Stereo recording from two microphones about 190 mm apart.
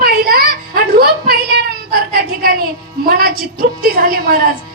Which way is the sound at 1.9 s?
50° right (ahead or behind).